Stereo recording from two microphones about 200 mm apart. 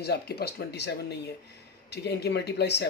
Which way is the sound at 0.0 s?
55° left (ahead or behind).